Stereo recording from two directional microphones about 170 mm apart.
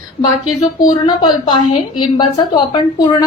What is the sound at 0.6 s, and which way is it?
A woman's voice, 25° left (ahead or behind).